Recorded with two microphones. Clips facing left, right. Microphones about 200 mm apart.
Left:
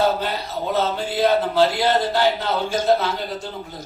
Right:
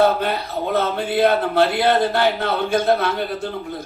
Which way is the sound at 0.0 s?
55° right (ahead or behind).